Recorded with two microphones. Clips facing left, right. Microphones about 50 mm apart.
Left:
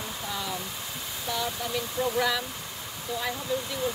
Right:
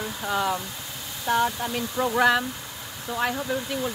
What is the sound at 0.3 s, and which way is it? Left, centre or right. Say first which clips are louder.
Speech: right 10 dB; right.